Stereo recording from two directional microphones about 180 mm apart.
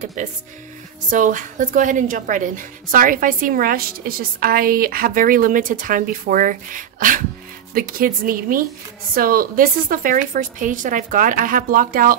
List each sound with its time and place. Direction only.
0.2 s a woman's voice: 45° right (ahead or behind)